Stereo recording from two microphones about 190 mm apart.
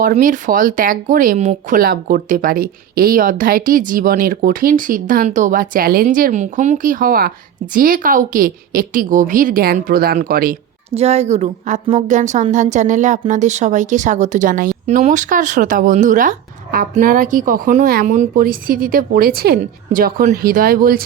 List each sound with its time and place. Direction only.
0.0 s speech: 45° right (ahead or behind)
10.9 s speech: 35° right (ahead or behind); by 21.0 s 50° right (ahead or behind)